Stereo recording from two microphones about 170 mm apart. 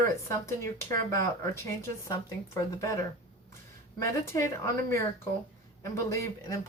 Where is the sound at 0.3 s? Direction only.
15° left (ahead or behind).